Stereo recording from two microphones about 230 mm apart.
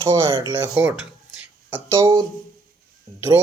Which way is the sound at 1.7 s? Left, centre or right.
Centre.